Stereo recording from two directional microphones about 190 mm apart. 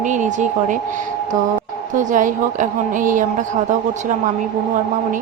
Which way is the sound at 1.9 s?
45° right (ahead or behind).